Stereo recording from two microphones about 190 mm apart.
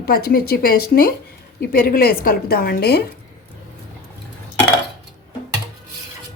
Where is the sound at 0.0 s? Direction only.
55° left (ahead or behind).